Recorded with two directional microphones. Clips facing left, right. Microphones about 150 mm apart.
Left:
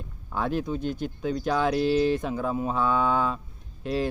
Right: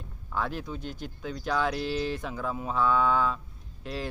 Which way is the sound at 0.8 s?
50° left (ahead or behind).